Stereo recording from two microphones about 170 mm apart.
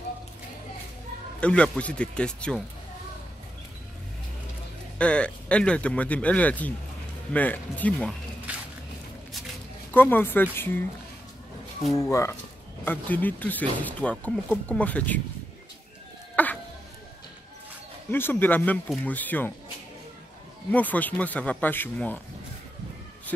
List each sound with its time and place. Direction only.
1.4 s speech: 5° left (ahead or behind)
4.9 s speech: 5° left (ahead or behind)
8.5 s a sound: 10° right (ahead or behind)
9.9 s speech: 10° left (ahead or behind)
11.9 s speech: 20° left (ahead or behind)
16.4 s a sound: 10° left (ahead or behind)
18.1 s speech: 10° left (ahead or behind)
20.7 s speech: 10° left (ahead or behind)